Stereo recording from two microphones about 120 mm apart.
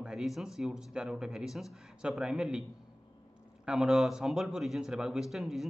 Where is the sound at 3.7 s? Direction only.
5° right (ahead or behind).